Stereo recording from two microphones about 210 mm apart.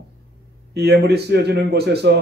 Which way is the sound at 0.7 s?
50° right (ahead or behind).